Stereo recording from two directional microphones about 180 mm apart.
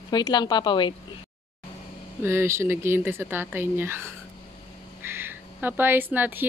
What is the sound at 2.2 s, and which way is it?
Speech, 15° right (ahead or behind).